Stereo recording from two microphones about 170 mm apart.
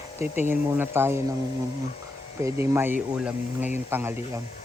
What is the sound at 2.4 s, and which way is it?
Speech, 15° right (ahead or behind).